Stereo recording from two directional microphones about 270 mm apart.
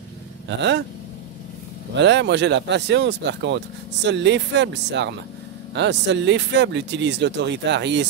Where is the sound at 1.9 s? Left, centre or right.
Right.